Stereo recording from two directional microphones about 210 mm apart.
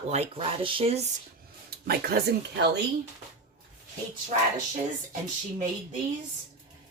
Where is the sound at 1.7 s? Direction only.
45° right (ahead or behind).